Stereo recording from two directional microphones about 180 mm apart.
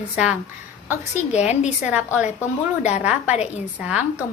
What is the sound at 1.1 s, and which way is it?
Speech, 40° left (ahead or behind).